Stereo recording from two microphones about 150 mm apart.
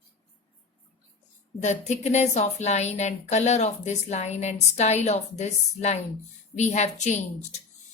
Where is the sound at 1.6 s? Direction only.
50° left (ahead or behind).